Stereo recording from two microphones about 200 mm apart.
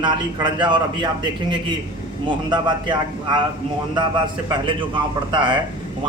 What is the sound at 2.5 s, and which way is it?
Speech, 25° right (ahead or behind).